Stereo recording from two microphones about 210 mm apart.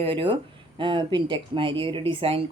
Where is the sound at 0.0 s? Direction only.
25° right (ahead or behind).